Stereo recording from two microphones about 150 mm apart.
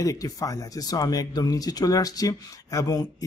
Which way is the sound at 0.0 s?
20° left (ahead or behind).